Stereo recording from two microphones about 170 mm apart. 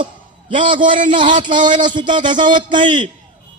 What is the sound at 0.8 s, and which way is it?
A man's voice, 50° right (ahead or behind).